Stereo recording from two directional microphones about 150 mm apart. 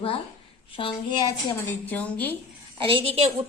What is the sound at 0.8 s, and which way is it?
Speech, 30° left (ahead or behind).